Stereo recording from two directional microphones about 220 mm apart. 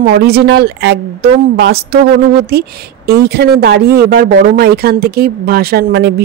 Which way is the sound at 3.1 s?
45° right (ahead or behind).